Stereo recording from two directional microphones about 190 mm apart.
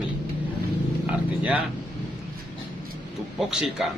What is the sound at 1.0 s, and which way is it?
Speech, 5° right (ahead or behind).